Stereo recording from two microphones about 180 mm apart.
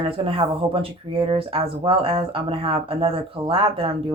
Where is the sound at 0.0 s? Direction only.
30° right (ahead or behind).